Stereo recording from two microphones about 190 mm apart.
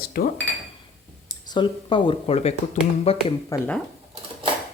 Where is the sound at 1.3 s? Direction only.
25° left (ahead or behind).